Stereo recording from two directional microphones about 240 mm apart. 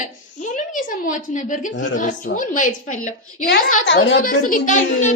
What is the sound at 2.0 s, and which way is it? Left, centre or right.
A woman's voice, left.